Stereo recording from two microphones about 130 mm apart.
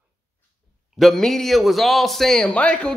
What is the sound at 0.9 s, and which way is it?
Speech, centre (ahead or behind).